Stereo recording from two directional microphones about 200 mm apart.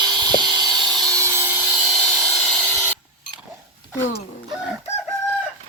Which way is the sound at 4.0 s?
70° left (ahead or behind).